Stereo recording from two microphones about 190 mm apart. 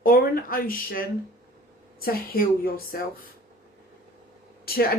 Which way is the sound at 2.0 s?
50° left (ahead or behind).